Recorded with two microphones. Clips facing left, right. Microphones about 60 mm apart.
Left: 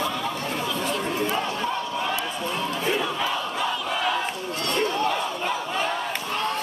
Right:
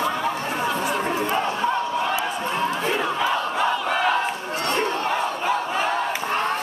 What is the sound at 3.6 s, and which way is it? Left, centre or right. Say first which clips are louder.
Battle cry: right 5 dB; right.